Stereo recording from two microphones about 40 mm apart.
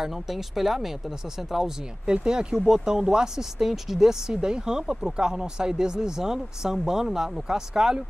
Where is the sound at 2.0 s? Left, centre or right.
Right.